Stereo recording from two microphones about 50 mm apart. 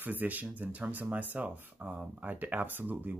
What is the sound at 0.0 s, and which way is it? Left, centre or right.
Speech, right.